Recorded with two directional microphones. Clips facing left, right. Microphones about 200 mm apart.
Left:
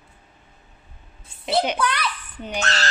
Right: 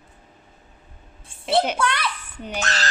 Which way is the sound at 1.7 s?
25° right (ahead or behind).